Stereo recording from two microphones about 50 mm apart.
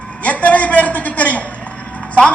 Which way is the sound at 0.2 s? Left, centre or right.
Left.